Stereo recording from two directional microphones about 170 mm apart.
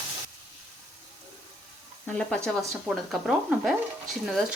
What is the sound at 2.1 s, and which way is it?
Frying, 5° left (ahead or behind).